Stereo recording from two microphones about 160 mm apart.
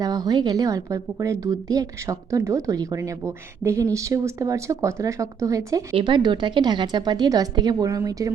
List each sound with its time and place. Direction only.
0.0 s speech: 25° right (ahead or behind)
5.9 s speech: 30° right (ahead or behind)